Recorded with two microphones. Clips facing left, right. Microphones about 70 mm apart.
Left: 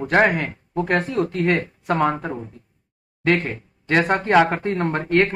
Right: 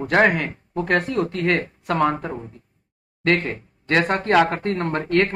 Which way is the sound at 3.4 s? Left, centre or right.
Right.